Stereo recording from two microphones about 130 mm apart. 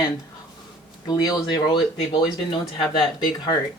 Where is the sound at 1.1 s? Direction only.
30° left (ahead or behind).